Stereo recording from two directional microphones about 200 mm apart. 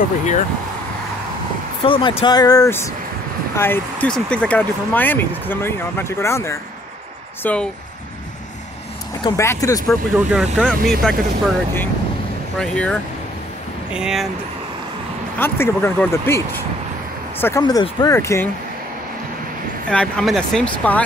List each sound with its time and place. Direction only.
1.8 s speech: 25° left (ahead or behind); by 7.6 s 10° left (ahead or behind)
9.2 s speech: 15° left (ahead or behind)
10.3 s speech: centre (ahead or behind)
15.3 s speech: 10° left (ahead or behind)
19.9 s speech: 5° left (ahead or behind)